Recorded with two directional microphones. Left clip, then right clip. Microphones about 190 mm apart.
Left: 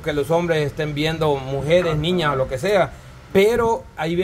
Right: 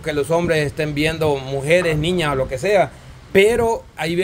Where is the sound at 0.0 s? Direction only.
15° right (ahead or behind).